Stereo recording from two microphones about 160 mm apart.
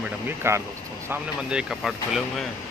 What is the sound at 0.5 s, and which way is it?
Speech, 15° right (ahead or behind).